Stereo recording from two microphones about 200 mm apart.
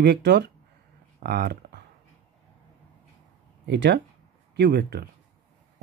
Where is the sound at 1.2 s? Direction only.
55° right (ahead or behind).